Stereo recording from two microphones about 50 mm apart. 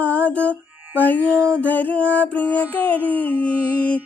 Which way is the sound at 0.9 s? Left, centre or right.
Left.